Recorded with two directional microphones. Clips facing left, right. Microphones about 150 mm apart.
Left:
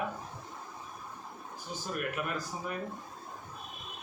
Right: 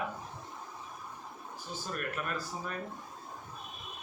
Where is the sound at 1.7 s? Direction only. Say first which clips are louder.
Left 2 dB; 15° left (ahead or behind).